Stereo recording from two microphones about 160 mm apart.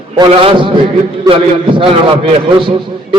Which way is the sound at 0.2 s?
30° right (ahead or behind).